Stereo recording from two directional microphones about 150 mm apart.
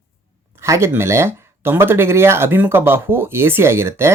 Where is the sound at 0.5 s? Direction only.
20° right (ahead or behind).